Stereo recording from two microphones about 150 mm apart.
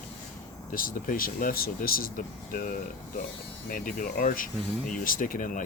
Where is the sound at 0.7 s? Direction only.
65° left (ahead or behind).